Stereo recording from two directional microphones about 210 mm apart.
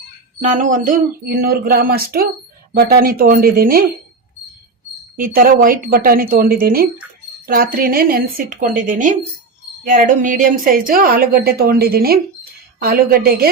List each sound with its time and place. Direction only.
0.6 s a woman's voice: 40° right (ahead or behind)
5.1 s a woman's voice: 45° right (ahead or behind)